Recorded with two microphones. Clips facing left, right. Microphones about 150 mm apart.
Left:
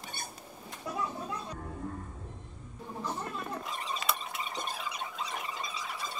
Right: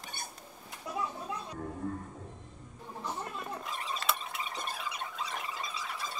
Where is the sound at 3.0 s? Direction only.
10° right (ahead or behind).